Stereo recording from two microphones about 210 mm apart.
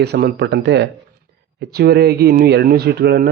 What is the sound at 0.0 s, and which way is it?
Speech, 50° right (ahead or behind).